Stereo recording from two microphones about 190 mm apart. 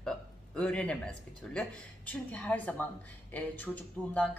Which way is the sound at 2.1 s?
10° left (ahead or behind).